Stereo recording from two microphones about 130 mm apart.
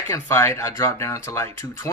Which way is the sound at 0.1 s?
20° left (ahead or behind).